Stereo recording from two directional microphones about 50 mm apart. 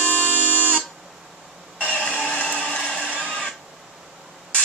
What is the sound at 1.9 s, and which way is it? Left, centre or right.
Printer, left.